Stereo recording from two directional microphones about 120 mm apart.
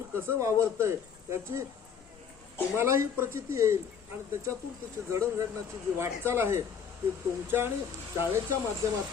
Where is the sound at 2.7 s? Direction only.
20° right (ahead or behind).